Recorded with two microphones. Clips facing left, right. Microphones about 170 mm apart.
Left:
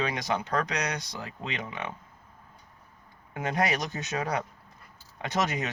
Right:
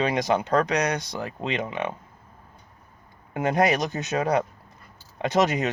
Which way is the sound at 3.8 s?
45° right (ahead or behind).